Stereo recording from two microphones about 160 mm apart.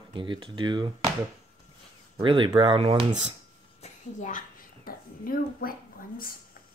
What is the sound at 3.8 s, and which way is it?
A child's voice, 50° left (ahead or behind).